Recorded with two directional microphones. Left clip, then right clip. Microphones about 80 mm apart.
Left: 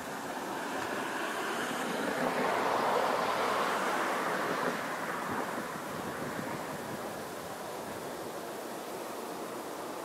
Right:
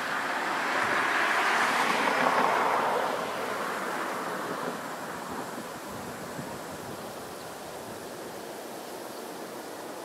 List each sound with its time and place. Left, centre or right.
0.7 s vehicle: left
2.3 s train: right
2.9 s vehicle: centre